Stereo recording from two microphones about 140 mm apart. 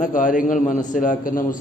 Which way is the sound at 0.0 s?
65° left (ahead or behind).